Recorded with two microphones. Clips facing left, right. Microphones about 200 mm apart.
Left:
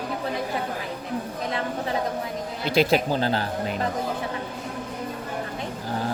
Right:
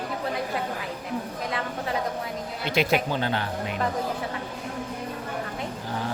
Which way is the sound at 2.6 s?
35° left (ahead or behind).